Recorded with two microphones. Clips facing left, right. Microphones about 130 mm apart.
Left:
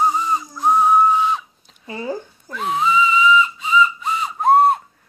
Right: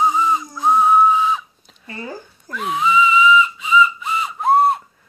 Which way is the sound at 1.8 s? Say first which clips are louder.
Left 3 dB; 20° left (ahead or behind).